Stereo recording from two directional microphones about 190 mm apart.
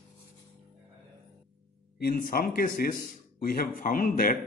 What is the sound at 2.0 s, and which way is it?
Speech, 50° left (ahead or behind).